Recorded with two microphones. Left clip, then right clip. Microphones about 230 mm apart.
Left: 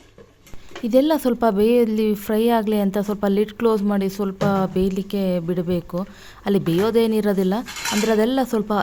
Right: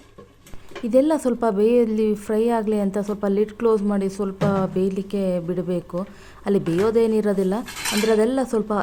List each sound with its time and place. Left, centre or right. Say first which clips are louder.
0.9 s speech: left 1 dB; left